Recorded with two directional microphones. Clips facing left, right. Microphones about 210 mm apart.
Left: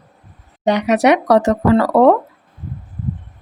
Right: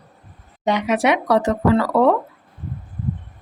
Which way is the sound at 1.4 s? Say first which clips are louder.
Left 4 dB; 60° left (ahead or behind).